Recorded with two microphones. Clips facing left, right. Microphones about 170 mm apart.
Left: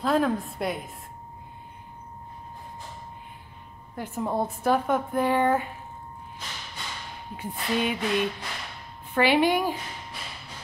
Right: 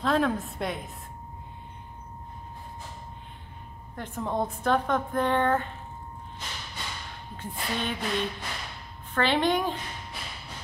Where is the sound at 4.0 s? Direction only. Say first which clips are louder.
Left 2 dB; 5° left (ahead or behind).